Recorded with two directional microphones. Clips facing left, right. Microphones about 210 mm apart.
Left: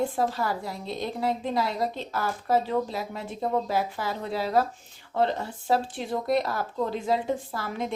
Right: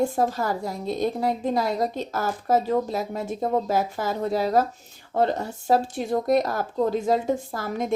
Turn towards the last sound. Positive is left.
turn(degrees=-45)  # may be behind; listen again after turning